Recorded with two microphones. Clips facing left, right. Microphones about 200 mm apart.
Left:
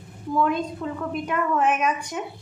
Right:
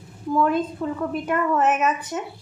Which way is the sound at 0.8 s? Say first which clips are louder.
Right 3 dB; 5° right (ahead or behind).